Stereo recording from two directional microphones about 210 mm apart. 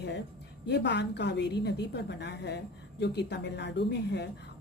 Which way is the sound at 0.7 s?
55° left (ahead or behind).